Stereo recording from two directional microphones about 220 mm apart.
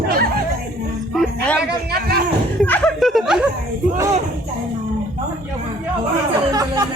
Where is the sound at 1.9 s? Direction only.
45° right (ahead or behind).